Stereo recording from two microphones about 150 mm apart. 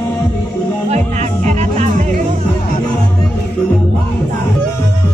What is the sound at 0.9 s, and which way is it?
Music, 50° right (ahead or behind).